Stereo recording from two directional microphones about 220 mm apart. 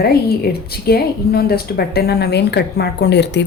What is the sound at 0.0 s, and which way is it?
A woman's voice, 45° left (ahead or behind).